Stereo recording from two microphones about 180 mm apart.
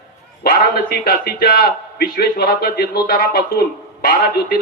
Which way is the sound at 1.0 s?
55° left (ahead or behind).